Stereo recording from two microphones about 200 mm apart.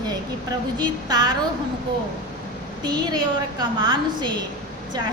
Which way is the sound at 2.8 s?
20° right (ahead or behind).